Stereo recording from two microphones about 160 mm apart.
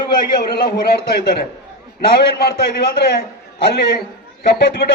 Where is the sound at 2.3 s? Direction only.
85° left.